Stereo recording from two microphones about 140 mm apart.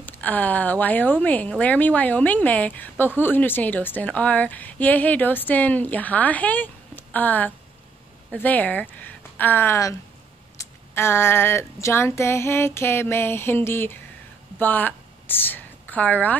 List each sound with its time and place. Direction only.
0.0 s a woman's voice: 10° left (ahead or behind)